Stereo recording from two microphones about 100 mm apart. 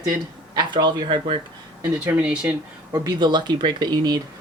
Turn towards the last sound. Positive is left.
turn(degrees=-45)  # may be behind; listen again after turning